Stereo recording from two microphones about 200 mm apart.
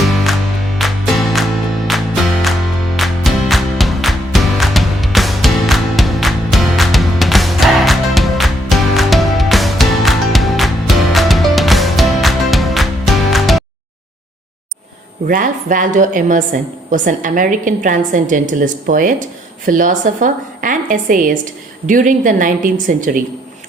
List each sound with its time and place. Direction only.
0.1 s music: centre (ahead or behind)
15.3 s a woman's voice: 40° right (ahead or behind)